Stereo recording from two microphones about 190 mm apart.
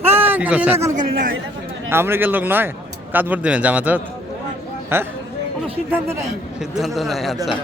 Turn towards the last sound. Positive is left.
turn(degrees=0)  # may be behind; listen again after turning